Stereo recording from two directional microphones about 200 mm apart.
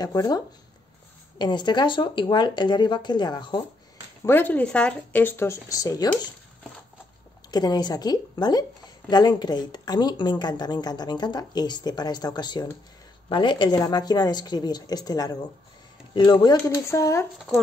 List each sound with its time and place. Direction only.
0.0 s a woman's voice: 20° left (ahead or behind)
1.4 s a woman's voice: 20° left (ahead or behind)
4.2 s speech: 10° left (ahead or behind)
7.5 s a woman's voice: 20° left (ahead or behind)